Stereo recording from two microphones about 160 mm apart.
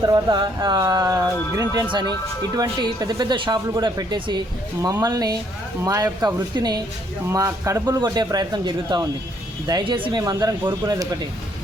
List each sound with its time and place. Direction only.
0.0 s a man's voice: 25° right (ahead or behind)